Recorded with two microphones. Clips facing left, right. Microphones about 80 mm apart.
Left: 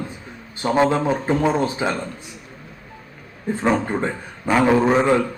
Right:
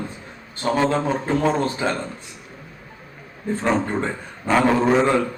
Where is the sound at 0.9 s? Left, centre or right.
Centre.